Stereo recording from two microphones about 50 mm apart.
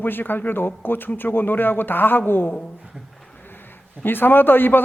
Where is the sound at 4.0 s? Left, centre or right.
Left.